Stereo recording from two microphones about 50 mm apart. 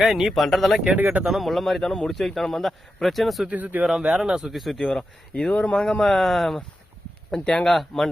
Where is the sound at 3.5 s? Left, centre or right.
Right.